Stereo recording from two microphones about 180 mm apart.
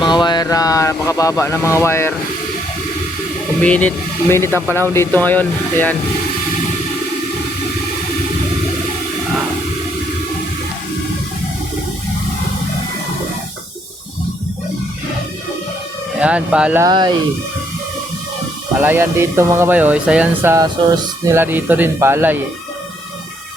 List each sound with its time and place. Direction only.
0.0 s speech: 25° left (ahead or behind)
3.6 s speech: 10° left (ahead or behind)
16.2 s speech: 5° right (ahead or behind)
16.8 s speech: 25° right (ahead or behind)
18.8 s speech: 10° right (ahead or behind)